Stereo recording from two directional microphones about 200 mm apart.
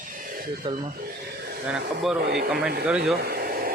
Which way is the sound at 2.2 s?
55° right (ahead or behind).